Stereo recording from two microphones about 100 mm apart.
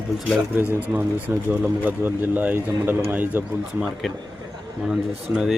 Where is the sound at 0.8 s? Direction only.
20° right (ahead or behind).